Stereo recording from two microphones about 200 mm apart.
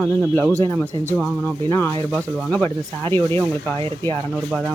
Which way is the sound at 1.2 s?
10° left (ahead or behind).